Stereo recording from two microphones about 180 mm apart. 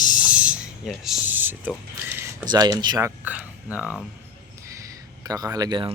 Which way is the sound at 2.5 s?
20° right (ahead or behind).